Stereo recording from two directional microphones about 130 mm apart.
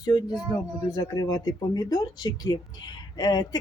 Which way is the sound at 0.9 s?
30° left (ahead or behind).